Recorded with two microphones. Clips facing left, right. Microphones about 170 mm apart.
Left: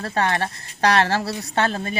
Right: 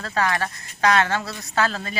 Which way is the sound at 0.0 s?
30° left (ahead or behind).